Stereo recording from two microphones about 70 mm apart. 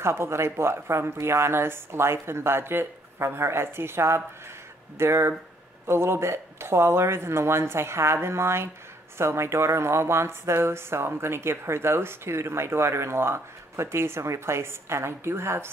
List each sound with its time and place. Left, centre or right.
0.0 s speech: right